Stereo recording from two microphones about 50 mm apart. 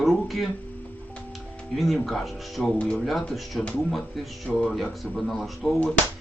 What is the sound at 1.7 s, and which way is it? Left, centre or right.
Speech, centre.